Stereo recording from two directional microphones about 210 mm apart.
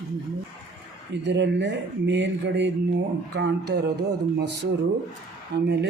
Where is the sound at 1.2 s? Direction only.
55° right (ahead or behind).